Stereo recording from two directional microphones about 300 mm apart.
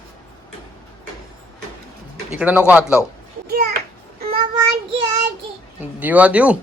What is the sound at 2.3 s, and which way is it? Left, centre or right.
Speech, centre.